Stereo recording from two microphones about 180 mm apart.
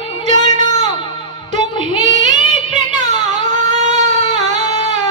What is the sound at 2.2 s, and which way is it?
Music of bollywood, 40° right (ahead or behind).